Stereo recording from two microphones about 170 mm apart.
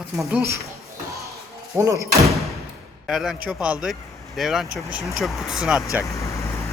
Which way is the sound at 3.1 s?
Centre (ahead or behind).